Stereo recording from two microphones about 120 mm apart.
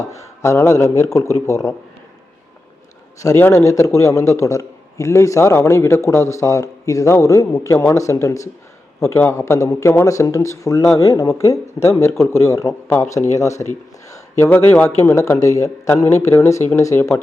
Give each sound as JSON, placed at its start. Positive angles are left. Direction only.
{"t": 0.0, "sound": "a man's voice", "side_deg": 25}
{"t": 3.2, "sound": "a man's voice", "side_deg": 25}